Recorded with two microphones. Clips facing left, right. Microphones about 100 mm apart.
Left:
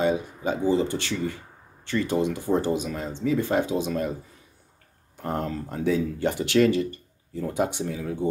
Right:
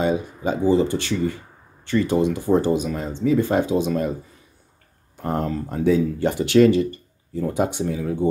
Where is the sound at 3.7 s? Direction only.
45° right (ahead or behind).